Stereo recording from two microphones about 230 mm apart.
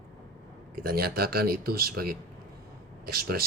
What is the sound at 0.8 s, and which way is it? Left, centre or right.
A man's voice, right.